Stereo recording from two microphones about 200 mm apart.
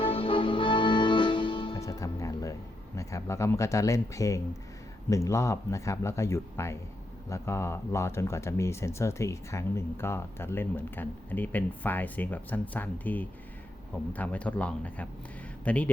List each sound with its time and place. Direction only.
0.0 s music: 25° left (ahead or behind)
5.0 s speech: 15° left (ahead or behind)